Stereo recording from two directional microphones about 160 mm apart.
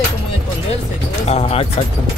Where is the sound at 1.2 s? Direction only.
40° left (ahead or behind).